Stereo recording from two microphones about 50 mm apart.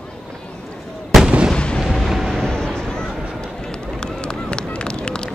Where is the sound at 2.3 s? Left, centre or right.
Centre.